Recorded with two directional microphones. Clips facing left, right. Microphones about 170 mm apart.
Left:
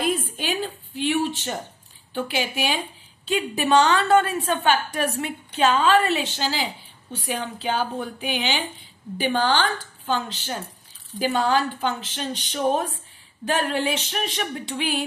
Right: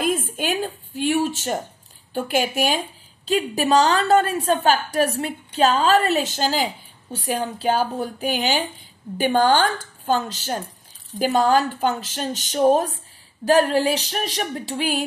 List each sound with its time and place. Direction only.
0.0 s a woman's voice: 45° right (ahead or behind)